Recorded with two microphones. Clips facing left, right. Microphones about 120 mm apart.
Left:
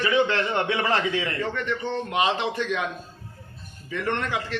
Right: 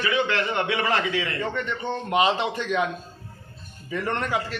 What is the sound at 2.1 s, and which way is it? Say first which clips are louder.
Speech: right 3 dB; 15° right (ahead or behind).